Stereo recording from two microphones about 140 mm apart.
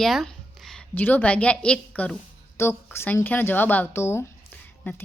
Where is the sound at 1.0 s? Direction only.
10° left (ahead or behind).